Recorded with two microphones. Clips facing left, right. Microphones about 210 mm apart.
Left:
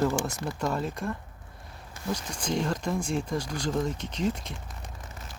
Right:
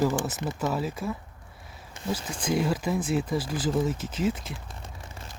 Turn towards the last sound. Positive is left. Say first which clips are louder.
# right 2 dB
turn(degrees=-5)  # may be behind; listen again after turning